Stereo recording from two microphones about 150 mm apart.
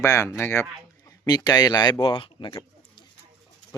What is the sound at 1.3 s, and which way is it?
Speech, 25° left (ahead or behind).